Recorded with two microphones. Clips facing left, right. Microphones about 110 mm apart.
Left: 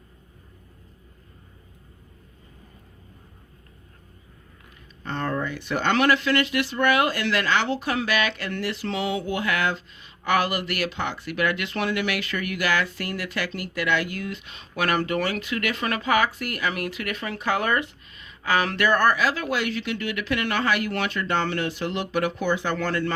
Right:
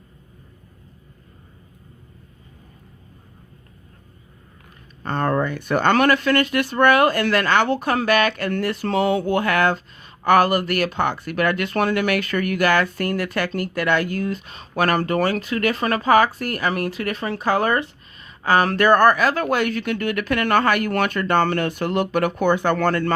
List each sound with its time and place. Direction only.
5.0 s speech: 50° right (ahead or behind)